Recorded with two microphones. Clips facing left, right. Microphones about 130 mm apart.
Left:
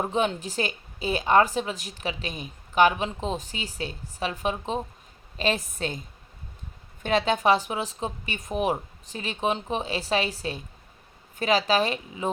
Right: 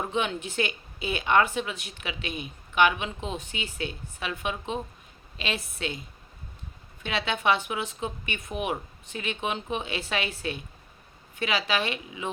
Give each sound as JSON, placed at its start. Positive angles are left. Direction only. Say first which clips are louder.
{"t": 0.0, "sound": "a woman's voice", "louder": "left 3 dB", "side_deg": 35}
{"t": 7.0, "sound": "a woman's voice", "louder": "left 5 dB", "side_deg": 45}